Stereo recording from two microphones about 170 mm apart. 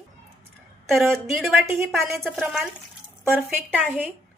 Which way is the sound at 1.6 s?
15° right (ahead or behind).